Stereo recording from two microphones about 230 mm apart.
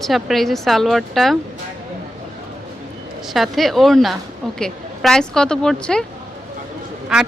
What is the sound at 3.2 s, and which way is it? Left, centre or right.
Speech, centre.